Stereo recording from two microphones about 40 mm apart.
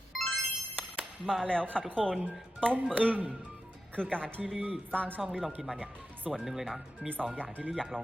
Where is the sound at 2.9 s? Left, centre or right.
Right.